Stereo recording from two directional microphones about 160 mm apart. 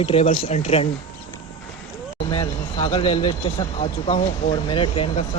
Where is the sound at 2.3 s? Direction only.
35° left (ahead or behind).